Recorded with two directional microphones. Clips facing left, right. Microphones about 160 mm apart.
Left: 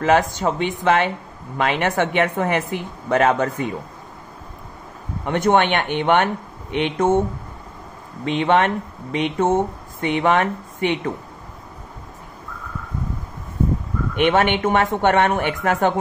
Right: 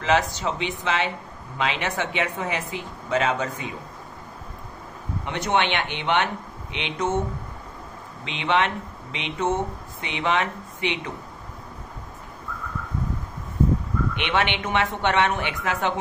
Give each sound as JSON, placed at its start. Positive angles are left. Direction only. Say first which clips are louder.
{"t": 0.0, "sound": "speech", "louder": "left 5 dB", "side_deg": 50}
{"t": 5.2, "sound": "speech", "louder": "left 7 dB", "side_deg": 50}
{"t": 8.3, "sound": "speech", "louder": "left 6 dB", "side_deg": 50}
{"t": 14.1, "sound": "speech", "louder": "left 10 dB", "side_deg": 45}